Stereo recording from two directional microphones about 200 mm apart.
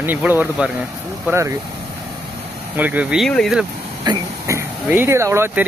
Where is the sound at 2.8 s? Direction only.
10° right (ahead or behind).